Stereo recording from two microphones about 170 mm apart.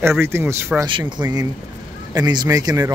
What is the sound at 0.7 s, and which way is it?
Speech, 25° right (ahead or behind).